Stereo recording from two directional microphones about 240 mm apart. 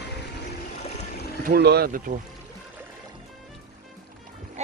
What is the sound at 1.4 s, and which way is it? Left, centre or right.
Speech, right.